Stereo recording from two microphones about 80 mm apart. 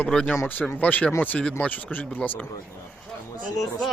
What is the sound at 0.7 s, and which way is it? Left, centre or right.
Speech, centre.